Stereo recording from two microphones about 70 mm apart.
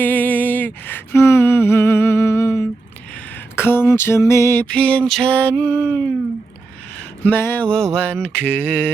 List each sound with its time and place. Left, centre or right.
0.0 s a sound: left
3.5 s a sound: left
4.2 s music: left
4.6 s music: centre
5.2 s mantra: left
7.3 s music: left
7.7 s mantra: centre